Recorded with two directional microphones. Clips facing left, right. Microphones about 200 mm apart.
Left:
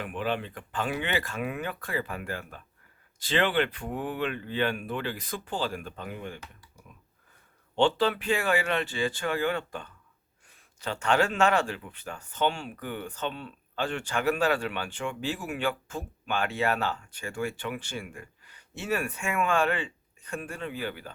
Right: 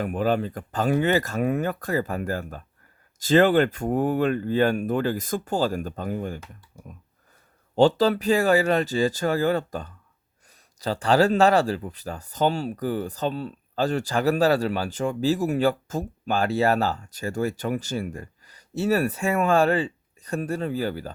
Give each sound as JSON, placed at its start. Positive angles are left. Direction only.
{"t": 0.0, "sound": "speech", "side_deg": -40}
{"t": 7.8, "sound": "speech", "side_deg": -40}